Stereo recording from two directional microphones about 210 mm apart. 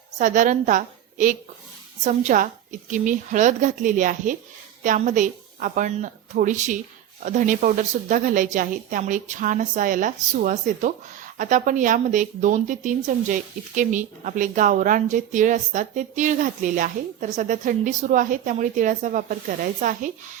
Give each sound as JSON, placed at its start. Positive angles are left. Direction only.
{"t": 0.2, "sound": "a woman's voice", "side_deg": -35}